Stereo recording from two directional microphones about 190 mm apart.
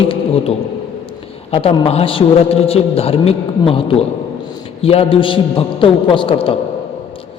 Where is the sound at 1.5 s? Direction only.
30° left (ahead or behind).